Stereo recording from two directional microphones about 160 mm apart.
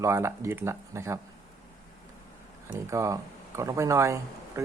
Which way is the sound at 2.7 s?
20° right (ahead or behind).